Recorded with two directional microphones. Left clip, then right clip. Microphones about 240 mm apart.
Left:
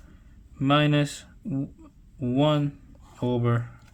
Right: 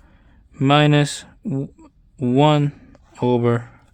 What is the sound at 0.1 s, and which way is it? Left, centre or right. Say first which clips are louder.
Speech: right 5 dB; right.